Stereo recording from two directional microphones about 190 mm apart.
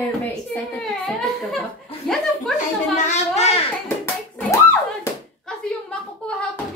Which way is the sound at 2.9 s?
40° left (ahead or behind).